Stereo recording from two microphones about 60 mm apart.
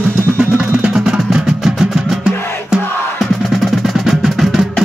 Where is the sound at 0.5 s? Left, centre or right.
Right.